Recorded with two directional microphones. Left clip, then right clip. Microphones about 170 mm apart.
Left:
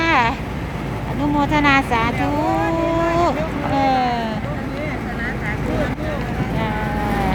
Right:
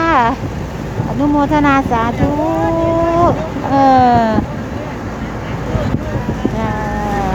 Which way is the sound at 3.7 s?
20° right (ahead or behind).